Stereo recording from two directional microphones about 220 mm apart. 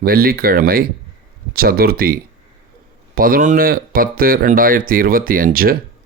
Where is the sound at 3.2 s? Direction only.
40° right (ahead or behind).